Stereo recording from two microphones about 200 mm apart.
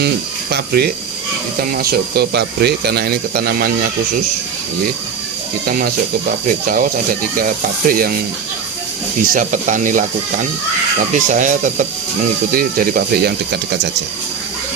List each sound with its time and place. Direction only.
0.5 s speech: 50° right (ahead or behind)
5.6 s speech: 50° right (ahead or behind)
9.3 s speech: 40° right (ahead or behind)
11.1 s speech: 40° right (ahead or behind)